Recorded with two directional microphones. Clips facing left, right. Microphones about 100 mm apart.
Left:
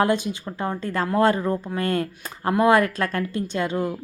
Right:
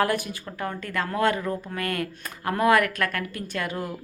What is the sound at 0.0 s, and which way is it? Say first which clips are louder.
Speech: left 3 dB; 20° left (ahead or behind).